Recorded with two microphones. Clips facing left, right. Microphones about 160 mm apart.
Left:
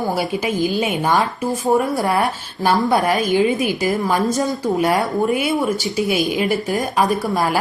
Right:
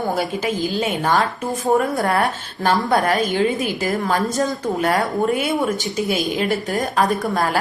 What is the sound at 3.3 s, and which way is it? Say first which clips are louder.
Speech: left 3 dB; 20° left (ahead or behind).